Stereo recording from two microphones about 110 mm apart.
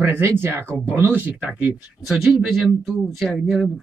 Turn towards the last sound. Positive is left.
turn(degrees=0)  # may be behind; listen again after turning